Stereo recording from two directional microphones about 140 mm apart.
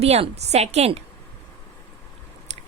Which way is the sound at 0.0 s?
50° right (ahead or behind).